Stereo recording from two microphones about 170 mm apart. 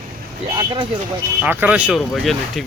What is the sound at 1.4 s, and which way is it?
Speech, 10° right (ahead or behind).